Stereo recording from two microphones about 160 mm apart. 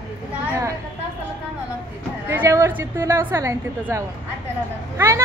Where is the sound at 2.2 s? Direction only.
15° right (ahead or behind).